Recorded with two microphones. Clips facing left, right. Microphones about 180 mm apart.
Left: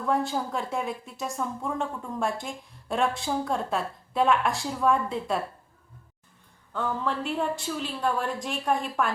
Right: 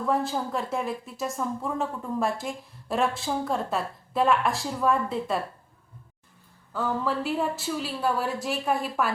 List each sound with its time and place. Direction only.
0.0 s a woman's voice: centre (ahead or behind)
6.7 s a woman's voice: 5° right (ahead or behind)